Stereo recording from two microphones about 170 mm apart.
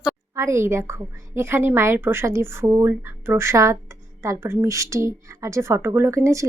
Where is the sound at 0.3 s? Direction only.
15° right (ahead or behind).